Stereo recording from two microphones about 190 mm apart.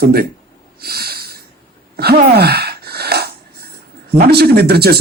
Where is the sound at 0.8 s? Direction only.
55° right (ahead or behind).